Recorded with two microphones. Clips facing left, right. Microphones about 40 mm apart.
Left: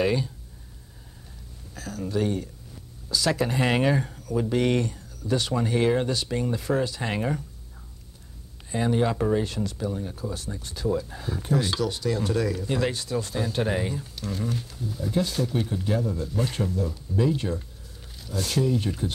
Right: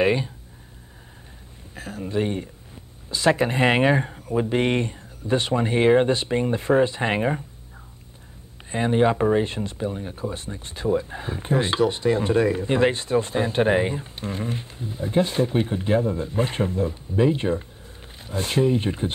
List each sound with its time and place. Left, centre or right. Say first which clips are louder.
0.0 s speech: right 4 dB; right
1.8 s speech: right 2 dB; right
8.6 s speech: right 4 dB; right